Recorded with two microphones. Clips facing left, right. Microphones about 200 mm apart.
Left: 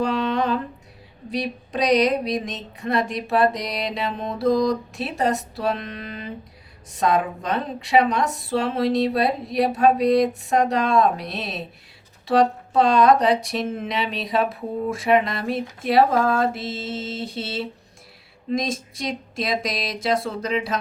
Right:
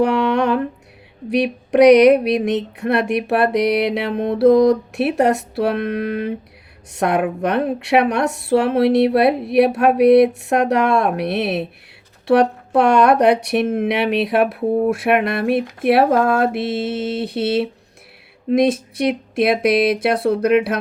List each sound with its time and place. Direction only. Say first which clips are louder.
0.0 s humming: right 6 dB; 70° right (ahead or behind)
1.3 s a sound: right 9 dB; 70° right (ahead or behind)
12.3 s speech: right 4 dB; 70° right (ahead or behind)